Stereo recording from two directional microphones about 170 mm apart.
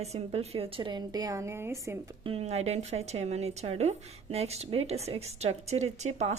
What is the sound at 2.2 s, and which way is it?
A woman's voice, 35° right (ahead or behind).